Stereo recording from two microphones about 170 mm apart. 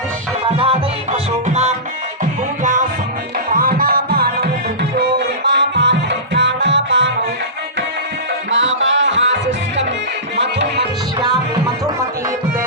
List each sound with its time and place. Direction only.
0.4 s music: 35° right (ahead or behind)
3.5 s music: 55° right (ahead or behind); by 7.1 s 90° right
8.4 s music: 90° right